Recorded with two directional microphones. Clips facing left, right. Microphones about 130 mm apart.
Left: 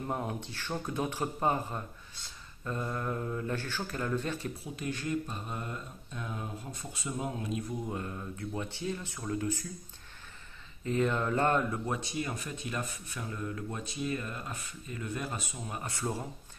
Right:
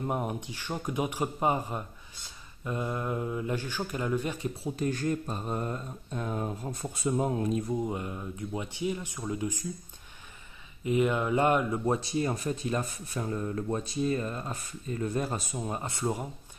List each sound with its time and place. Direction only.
0.0 s speech: 20° right (ahead or behind)
4.7 s speech: 40° right (ahead or behind)
7.7 s speech: 20° right (ahead or behind)
10.8 s speech: 15° right (ahead or behind)
11.8 s speech: 35° right (ahead or behind); by 16.3 s 20° right (ahead or behind)